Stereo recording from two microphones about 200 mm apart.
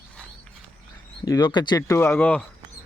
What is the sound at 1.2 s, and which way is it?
Speech, 20° left (ahead or behind).